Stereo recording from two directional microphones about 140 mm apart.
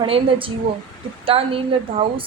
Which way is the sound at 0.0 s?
40° right (ahead or behind).